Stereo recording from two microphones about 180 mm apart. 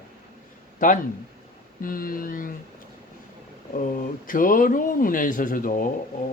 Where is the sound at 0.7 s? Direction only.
45° left (ahead or behind).